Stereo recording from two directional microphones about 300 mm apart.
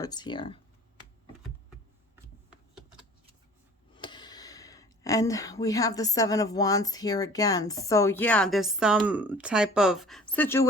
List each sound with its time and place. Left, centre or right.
0.0 s speech: centre
3.9 s speech: centre